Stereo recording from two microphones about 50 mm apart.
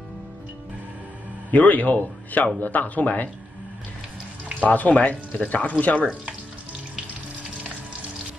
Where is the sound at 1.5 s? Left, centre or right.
Left.